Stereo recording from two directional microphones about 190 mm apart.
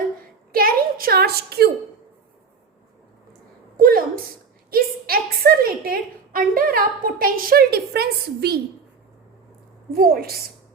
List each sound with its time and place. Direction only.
0.5 s a woman's voice: 50° right (ahead or behind)
3.8 s a sound: 50° right (ahead or behind)
4.7 s a woman's voice: 50° right (ahead or behind)
9.9 s a woman's voice: 50° right (ahead or behind)